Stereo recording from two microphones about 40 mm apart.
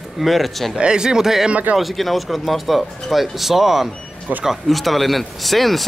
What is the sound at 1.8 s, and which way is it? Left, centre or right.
Speech, centre.